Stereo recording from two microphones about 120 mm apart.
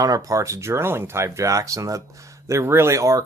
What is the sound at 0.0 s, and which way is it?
Speech, 30° right (ahead or behind).